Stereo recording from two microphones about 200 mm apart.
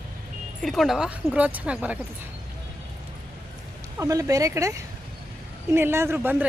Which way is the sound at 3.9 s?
15° right (ahead or behind).